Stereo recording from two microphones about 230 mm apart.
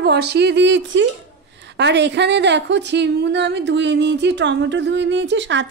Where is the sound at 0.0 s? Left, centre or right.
Right.